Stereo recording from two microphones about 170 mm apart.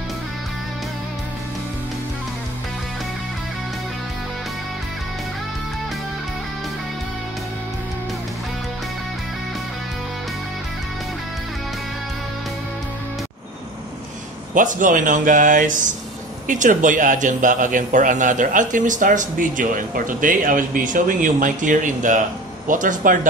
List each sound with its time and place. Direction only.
14.5 s a man's voice: 50° right (ahead or behind)